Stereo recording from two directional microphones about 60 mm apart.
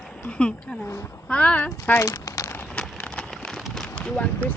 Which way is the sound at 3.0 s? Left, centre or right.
Centre.